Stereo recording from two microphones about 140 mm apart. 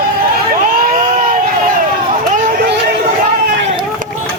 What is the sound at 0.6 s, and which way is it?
Crowd, 85° right.